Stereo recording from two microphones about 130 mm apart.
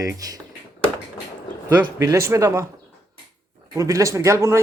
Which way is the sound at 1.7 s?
20° right (ahead or behind).